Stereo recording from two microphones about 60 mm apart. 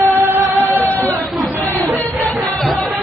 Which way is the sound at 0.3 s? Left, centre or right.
Right.